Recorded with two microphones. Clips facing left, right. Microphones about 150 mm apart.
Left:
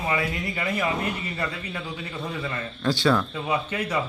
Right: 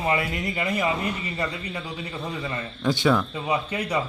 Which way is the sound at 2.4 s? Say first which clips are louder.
Right 1 dB; 15° right (ahead or behind).